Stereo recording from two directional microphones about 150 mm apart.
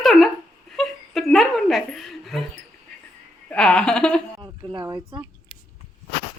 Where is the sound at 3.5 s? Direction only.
5° left (ahead or behind).